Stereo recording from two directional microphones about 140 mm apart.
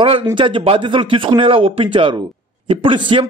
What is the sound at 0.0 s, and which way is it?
A man's voice, 35° right (ahead or behind).